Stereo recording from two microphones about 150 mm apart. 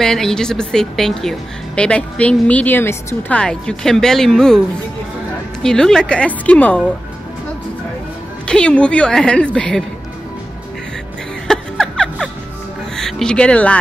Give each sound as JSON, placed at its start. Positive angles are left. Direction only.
{"t": 0.0, "sound": "a woman's voice", "side_deg": 5}
{"t": 5.6, "sound": "a woman's voice", "side_deg": 5}
{"t": 8.5, "sound": "a woman's voice", "side_deg": 5}
{"t": 11.4, "sound": "music", "side_deg": 5}
{"t": 12.9, "sound": "speech", "side_deg": 5}